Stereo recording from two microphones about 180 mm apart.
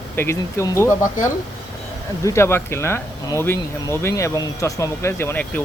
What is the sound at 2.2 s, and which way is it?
Speech, 15° left (ahead or behind).